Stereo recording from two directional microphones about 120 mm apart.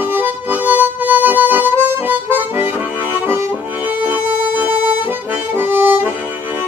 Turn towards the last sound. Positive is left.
turn(degrees=-20)  # may be behind; listen again after turning